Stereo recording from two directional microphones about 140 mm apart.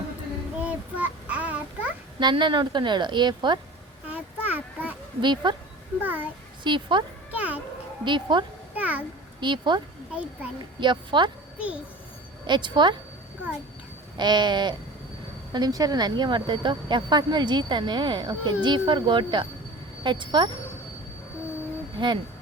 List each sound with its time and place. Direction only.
0.6 s child singing: 10° right (ahead or behind)
2.1 s a woman's voice: 35° right (ahead or behind)
4.1 s a sound: 10° right (ahead or behind)
5.2 s a woman's voice: 30° right (ahead or behind)
6.0 s a child's voice: 10° right (ahead or behind)
6.7 s a woman's voice: 35° right (ahead or behind)
7.3 s a sound: 10° right (ahead or behind)
8.0 s a woman's voice: 35° right (ahead or behind)
8.7 s a sound: 10° right (ahead or behind)
9.4 s a woman's voice: 35° right (ahead or behind)
12.5 s a woman's voice: 35° right (ahead or behind)
14.2 s a woman's voice: 30° right (ahead or behind)
21.9 s speech: 35° right (ahead or behind)